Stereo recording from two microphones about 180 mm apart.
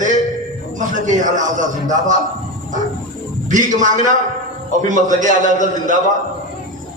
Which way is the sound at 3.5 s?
45° right (ahead or behind).